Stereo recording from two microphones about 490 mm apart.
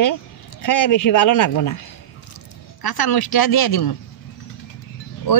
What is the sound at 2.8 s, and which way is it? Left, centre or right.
Speech, left.